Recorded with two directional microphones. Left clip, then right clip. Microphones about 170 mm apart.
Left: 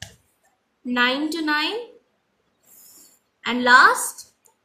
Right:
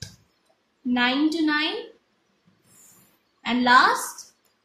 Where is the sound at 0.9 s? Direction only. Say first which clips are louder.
Left 1 dB; 55° left (ahead or behind).